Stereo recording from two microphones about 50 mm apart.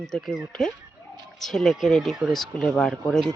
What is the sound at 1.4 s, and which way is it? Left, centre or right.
Speech, centre.